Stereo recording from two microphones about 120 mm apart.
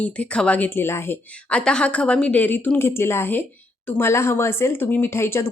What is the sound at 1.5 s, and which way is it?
A woman's voice, 10° left (ahead or behind).